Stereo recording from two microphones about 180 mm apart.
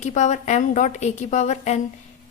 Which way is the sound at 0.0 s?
40° left (ahead or behind).